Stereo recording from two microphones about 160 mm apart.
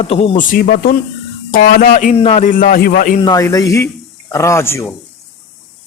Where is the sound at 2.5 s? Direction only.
60° left (ahead or behind).